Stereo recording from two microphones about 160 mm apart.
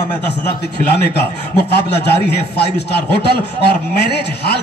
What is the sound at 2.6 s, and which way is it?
A man's voice, 90° left.